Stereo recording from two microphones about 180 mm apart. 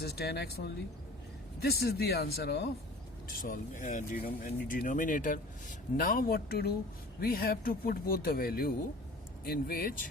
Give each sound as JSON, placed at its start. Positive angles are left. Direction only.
{"t": 0.0, "sound": "speech", "side_deg": 60}
{"t": 3.2, "sound": "speech", "side_deg": 55}